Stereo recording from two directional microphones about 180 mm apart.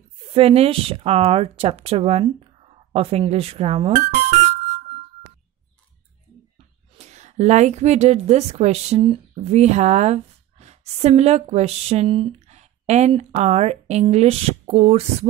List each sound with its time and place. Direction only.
0.3 s speech: 35° right (ahead or behind)
7.0 s a woman's voice: 40° right (ahead or behind)